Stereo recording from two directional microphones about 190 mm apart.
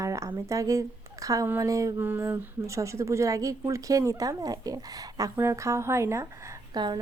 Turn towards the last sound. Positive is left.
turn(degrees=-25)  # may be behind; listen again after turning